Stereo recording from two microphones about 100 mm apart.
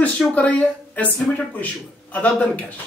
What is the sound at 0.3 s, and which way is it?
Speech, 15° left (ahead or behind).